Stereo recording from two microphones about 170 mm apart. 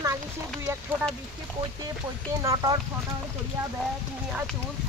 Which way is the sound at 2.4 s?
20° right (ahead or behind).